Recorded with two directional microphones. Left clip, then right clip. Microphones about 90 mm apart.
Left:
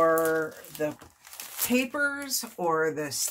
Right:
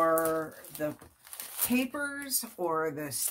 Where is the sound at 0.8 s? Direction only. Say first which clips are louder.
Left 4 dB; 25° left (ahead or behind).